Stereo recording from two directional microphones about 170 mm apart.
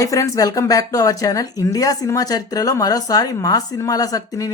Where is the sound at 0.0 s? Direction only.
20° left (ahead or behind).